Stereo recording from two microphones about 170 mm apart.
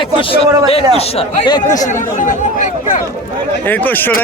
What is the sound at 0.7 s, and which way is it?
Speech, 35° left (ahead or behind).